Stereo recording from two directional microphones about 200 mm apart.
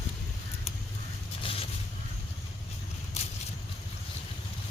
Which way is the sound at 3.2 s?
35° left (ahead or behind).